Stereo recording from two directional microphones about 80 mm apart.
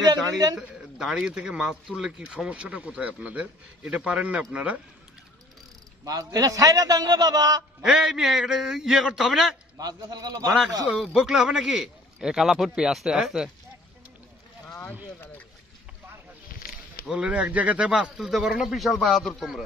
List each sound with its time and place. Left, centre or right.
0.0 s a sound: right
0.6 s speech: centre
6.0 s a man's voice: right
7.8 s speech: centre
9.8 s a man's voice: right
10.9 s speech: centre
17.1 s speech: centre
18.1 s speech: centre
19.0 s speech: centre